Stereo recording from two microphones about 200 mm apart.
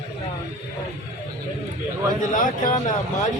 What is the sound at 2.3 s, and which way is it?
Speech, 40° left (ahead or behind).